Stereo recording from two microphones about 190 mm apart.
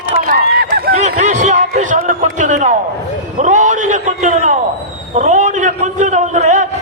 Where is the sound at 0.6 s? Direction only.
55° right (ahead or behind).